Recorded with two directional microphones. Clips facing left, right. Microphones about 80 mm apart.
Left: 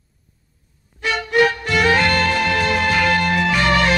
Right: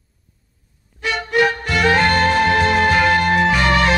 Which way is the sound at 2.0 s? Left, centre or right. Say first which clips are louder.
Right 3 dB; right.